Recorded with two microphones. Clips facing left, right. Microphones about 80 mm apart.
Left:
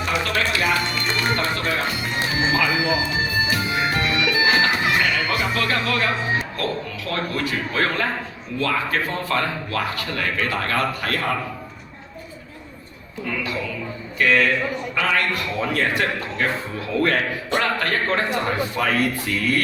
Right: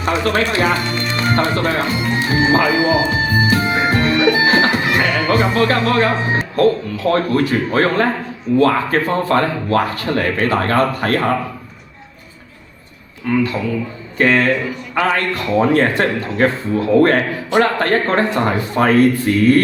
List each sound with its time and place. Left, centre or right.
0.0 s speech: right
13.3 s speech: right